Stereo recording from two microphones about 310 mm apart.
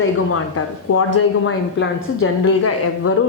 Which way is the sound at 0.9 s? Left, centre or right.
Left.